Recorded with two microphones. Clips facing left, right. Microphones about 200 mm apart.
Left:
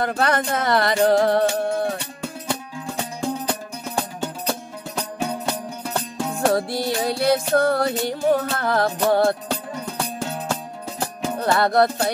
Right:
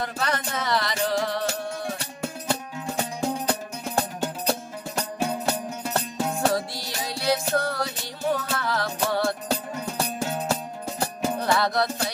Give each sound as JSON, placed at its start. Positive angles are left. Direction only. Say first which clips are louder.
{"t": 0.0, "sound": "music", "louder": "left 7 dB", "side_deg": 60}
{"t": 3.2, "sound": "music", "louder": "left 2 dB", "side_deg": -5}
{"t": 6.5, "sound": "music", "louder": "left 7 dB", "side_deg": 55}
{"t": 9.5, "sound": "music", "louder": "even", "side_deg": -5}
{"t": 11.5, "sound": "music", "louder": "left 9 dB", "side_deg": 55}